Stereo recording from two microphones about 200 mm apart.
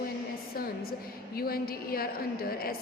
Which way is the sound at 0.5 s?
50° left (ahead or behind).